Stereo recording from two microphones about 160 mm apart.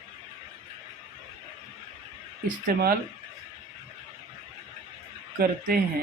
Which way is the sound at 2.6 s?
65° right (ahead or behind).